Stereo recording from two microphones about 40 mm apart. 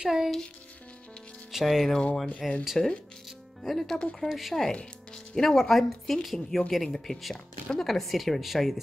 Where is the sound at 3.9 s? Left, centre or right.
Left.